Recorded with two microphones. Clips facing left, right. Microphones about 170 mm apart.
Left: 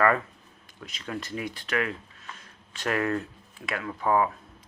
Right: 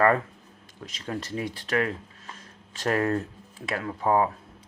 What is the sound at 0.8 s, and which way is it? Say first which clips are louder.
Speech: right 2 dB; 35° right (ahead or behind).